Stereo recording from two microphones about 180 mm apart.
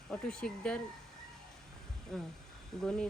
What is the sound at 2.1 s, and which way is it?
Speech, 5° left (ahead or behind).